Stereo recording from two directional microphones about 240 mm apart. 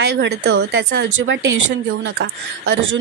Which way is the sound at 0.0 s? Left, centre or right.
Right.